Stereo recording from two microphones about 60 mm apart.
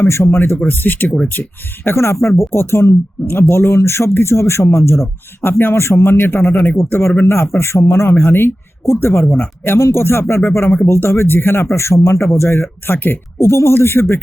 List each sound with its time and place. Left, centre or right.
0.1 s speech: left
1.0 s speech: centre
1.3 s speech: left
13.4 s speech: left